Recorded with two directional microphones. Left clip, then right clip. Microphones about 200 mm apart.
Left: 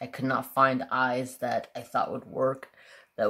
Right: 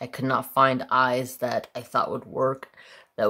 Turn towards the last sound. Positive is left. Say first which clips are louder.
# right 3 dB
turn(degrees=-20)  # may be behind; listen again after turning